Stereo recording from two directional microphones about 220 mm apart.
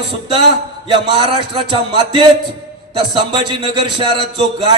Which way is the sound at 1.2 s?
25° right (ahead or behind).